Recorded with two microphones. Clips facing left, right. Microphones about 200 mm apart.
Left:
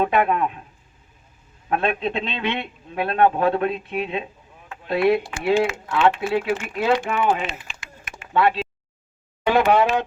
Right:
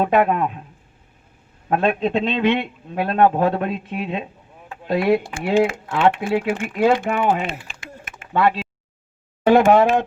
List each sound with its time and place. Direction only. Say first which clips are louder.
0.0 s a man's voice: right 2 dB; 40° right (ahead or behind)
1.7 s a man's voice: right 4 dB; 40° right (ahead or behind)
7.7 s typing: right 4 dB; 55° right (ahead or behind)
9.5 s speech: right 4 dB; 45° right (ahead or behind)